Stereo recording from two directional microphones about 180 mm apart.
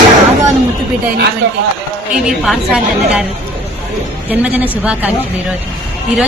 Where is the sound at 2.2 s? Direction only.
5° right (ahead or behind).